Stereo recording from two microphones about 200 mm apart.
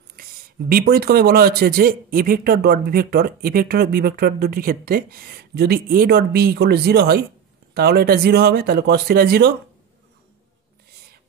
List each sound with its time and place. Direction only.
0.1 s speech: 45° right (ahead or behind)